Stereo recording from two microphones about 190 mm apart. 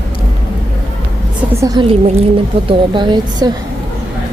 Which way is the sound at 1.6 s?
20° right (ahead or behind).